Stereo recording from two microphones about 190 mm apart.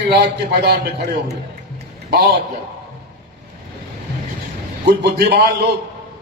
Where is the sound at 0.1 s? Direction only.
60° right (ahead or behind).